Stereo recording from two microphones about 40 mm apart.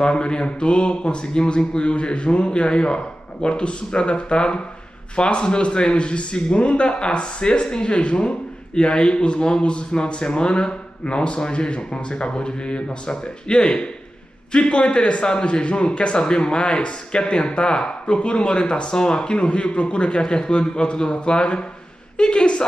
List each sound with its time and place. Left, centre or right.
0.0 s a woman's voice: left